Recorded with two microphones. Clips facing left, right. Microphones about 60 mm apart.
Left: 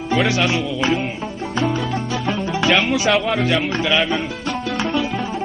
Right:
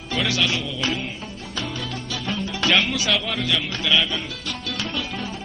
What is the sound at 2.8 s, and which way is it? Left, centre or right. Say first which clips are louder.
Speech: left 5 dB; left.